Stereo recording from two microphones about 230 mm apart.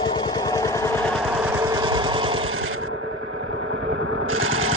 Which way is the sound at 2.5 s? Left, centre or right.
Right.